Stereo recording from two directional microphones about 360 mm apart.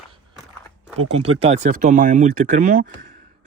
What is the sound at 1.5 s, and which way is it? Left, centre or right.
Speech, centre.